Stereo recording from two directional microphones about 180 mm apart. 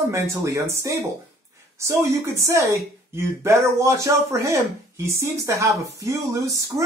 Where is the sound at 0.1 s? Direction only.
15° right (ahead or behind).